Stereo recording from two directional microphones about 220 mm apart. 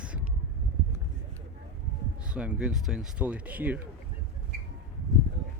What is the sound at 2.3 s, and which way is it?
Speech, 5° right (ahead or behind).